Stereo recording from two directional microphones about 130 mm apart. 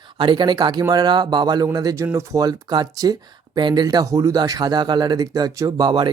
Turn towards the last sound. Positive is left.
turn(degrees=-35)  # may be behind; listen again after turning